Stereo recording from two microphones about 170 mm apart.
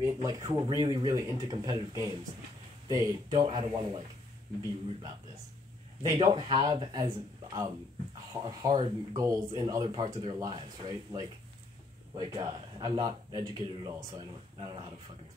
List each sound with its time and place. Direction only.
0.0 s speech: 20° right (ahead or behind)
6.1 s speech: 30° right (ahead or behind)